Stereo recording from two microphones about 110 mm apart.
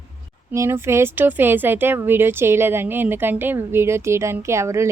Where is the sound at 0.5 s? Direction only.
25° right (ahead or behind).